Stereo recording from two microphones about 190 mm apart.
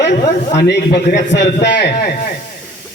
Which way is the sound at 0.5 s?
55° left (ahead or behind).